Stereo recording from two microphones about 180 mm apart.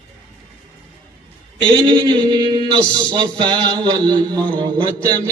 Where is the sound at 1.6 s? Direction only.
25° right (ahead or behind).